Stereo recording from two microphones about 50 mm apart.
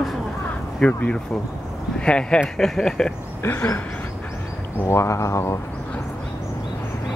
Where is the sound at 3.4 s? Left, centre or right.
Left.